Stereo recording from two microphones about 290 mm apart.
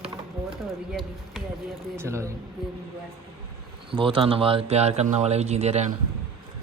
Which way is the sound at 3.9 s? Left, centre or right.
Centre.